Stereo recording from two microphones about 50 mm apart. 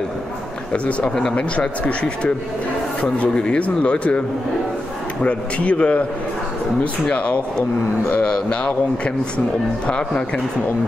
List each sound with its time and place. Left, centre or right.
1.1 s speech: centre
5.2 s speech: left